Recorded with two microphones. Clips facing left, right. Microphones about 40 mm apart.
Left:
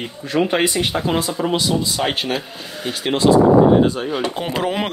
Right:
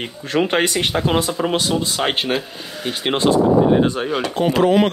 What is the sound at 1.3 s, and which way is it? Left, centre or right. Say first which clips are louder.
Speech: even; right.